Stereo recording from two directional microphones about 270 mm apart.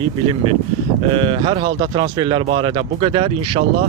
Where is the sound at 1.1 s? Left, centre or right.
Centre.